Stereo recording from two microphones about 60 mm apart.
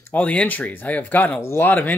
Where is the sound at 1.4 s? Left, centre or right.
Left.